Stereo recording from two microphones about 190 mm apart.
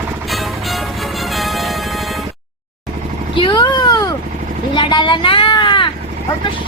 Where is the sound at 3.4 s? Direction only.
25° left (ahead or behind).